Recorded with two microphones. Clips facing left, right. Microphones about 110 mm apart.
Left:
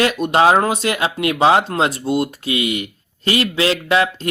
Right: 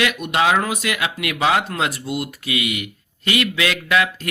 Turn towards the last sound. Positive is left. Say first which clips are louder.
# left 3 dB
turn(degrees=30)  # may be behind; listen again after turning